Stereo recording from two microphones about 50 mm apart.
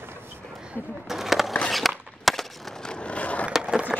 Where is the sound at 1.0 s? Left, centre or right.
Centre.